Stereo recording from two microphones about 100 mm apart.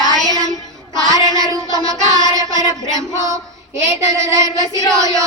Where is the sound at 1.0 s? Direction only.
45° left (ahead or behind).